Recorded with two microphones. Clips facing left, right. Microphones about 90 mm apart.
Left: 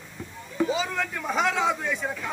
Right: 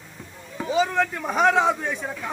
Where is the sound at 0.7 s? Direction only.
55° right (ahead or behind).